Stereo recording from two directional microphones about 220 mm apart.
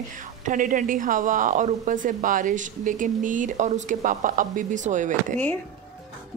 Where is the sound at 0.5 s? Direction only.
35° right (ahead or behind).